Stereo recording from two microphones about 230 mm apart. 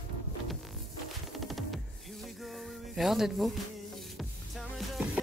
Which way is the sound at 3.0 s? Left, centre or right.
Centre.